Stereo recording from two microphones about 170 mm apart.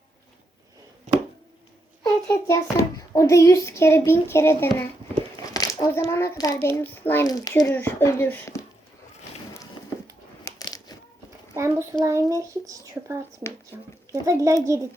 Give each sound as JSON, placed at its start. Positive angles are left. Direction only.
{"t": 1.1, "sound": "a sound", "side_deg": -45}
{"t": 2.2, "sound": "a child's voice", "side_deg": 15}
{"t": 7.3, "sound": "a child's voice", "side_deg": 20}
{"t": 10.4, "sound": "crushing", "side_deg": 20}
{"t": 11.5, "sound": "a child's voice", "side_deg": -15}